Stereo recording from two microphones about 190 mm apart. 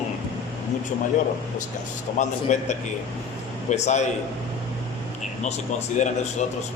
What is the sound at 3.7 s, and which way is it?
Speech, 35° left (ahead or behind).